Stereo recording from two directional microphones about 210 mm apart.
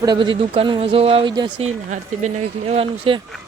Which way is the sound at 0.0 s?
20° right (ahead or behind).